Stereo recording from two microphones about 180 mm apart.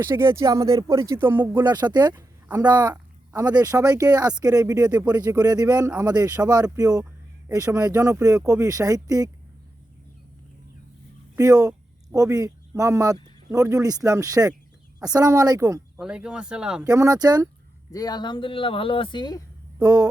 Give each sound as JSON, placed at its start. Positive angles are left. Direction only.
{"t": 0.0, "sound": "speech", "side_deg": -15}
{"t": 1.6, "sound": "a woman's voice", "side_deg": -25}
{"t": 11.3, "sound": "speech", "side_deg": -20}
{"t": 16.0, "sound": "speech", "side_deg": -5}
{"t": 16.8, "sound": "speech", "side_deg": -20}
{"t": 17.9, "sound": "speech", "side_deg": 20}
{"t": 19.8, "sound": "speech", "side_deg": -20}